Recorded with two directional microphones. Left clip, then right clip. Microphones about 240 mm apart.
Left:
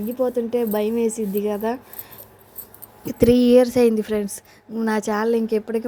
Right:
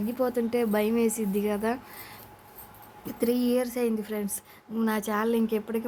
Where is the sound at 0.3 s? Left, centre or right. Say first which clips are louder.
Left 4 dB; centre.